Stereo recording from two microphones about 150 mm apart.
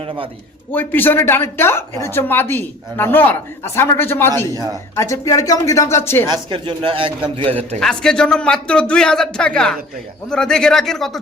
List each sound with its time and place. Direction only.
0.7 s speech: 15° left (ahead or behind)
4.5 s speech: 25° right (ahead or behind)
4.9 s speech: 20° left (ahead or behind)
6.2 s speech: 30° right (ahead or behind)
7.8 s speech: 5° left (ahead or behind)